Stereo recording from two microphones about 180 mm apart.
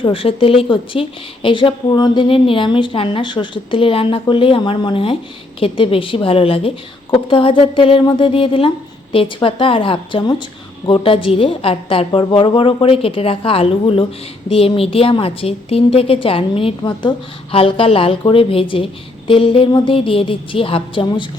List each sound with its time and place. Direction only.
0.0 s a woman's voice: 30° left (ahead or behind)